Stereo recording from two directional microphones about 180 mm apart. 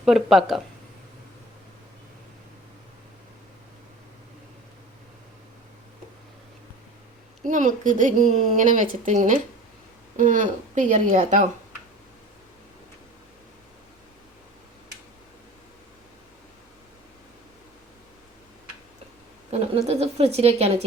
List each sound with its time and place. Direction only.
0.0 s speech: centre (ahead or behind)
7.4 s a woman's voice: 45° right (ahead or behind)
19.5 s a woman's voice: 35° right (ahead or behind)